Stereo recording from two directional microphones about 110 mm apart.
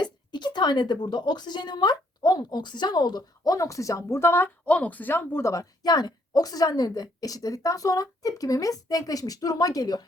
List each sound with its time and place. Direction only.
0.0 s speech: 40° left (ahead or behind)